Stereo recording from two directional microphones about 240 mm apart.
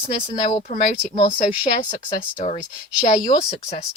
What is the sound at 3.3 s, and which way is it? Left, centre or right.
Speech, left.